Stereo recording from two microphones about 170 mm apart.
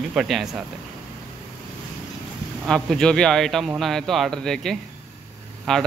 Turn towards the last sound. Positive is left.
turn(degrees=0)  # may be behind; listen again after turning